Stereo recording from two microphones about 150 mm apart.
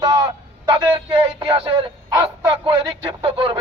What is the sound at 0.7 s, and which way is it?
Speech, 30° right (ahead or behind).